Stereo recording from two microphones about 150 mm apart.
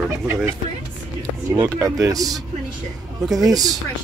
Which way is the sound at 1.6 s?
20° right (ahead or behind).